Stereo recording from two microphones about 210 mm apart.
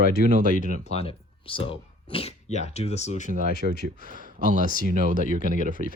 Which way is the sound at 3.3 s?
40° right (ahead or behind).